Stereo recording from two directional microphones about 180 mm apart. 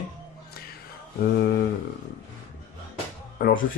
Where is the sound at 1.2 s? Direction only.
65° left (ahead or behind).